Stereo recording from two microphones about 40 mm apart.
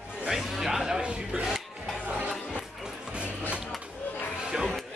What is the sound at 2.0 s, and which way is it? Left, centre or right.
Music, right.